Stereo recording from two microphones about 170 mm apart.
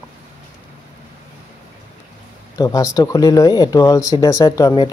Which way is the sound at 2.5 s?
20° left (ahead or behind).